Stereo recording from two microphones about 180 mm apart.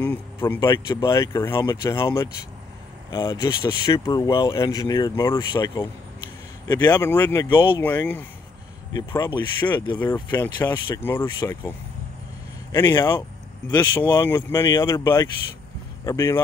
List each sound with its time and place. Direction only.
0.0 s speech: 10° left (ahead or behind)
7.4 s speech: 25° left (ahead or behind)
7.8 s speech: 15° left (ahead or behind)
10.3 s speech: 15° left (ahead or behind)
12.7 s speech: 20° left (ahead or behind)